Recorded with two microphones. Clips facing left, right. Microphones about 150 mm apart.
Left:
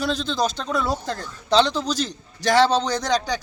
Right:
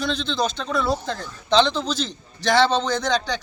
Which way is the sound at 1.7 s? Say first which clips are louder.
Left 1 dB; 40° left (ahead or behind).